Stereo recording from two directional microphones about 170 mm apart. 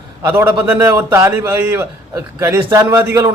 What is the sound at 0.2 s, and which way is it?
A man's voice, 10° right (ahead or behind).